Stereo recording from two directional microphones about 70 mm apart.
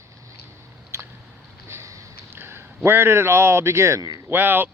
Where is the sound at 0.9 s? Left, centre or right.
Right.